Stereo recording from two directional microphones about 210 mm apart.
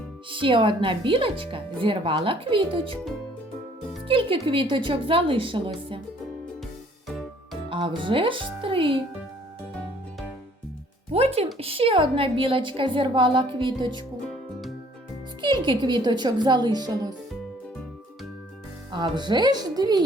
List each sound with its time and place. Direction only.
0.3 s speech: 25° right (ahead or behind)
4.1 s speech: 25° right (ahead or behind)
7.1 s music: centre (ahead or behind)
7.7 s speech: 25° right (ahead or behind)
11.1 s speech: 30° right (ahead or behind)
15.4 s speech: 20° right (ahead or behind)
18.9 s speech: 20° right (ahead or behind)